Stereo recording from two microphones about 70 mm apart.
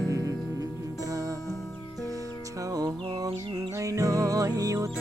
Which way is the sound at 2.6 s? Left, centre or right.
Right.